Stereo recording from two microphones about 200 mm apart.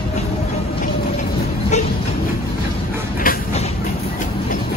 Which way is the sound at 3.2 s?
45° left (ahead or behind).